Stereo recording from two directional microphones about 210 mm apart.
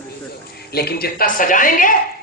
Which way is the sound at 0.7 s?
45° left (ahead or behind).